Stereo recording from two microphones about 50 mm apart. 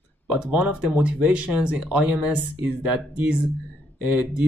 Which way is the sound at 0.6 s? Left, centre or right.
Right.